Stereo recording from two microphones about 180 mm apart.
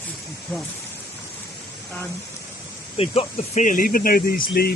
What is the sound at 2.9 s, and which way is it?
Speech, 35° left (ahead or behind).